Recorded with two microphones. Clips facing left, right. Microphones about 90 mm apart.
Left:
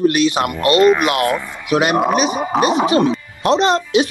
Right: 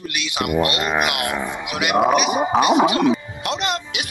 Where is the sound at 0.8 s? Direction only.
10° right (ahead or behind).